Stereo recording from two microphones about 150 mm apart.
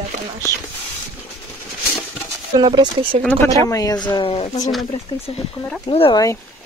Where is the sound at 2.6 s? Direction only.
30° right (ahead or behind).